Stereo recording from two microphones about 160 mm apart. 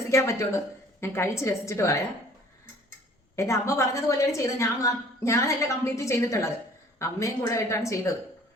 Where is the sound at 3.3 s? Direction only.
20° left (ahead or behind).